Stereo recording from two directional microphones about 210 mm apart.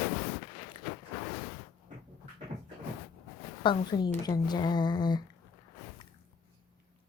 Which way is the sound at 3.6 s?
20° left (ahead or behind).